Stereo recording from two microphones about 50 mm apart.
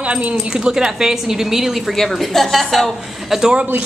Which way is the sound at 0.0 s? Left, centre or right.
Right.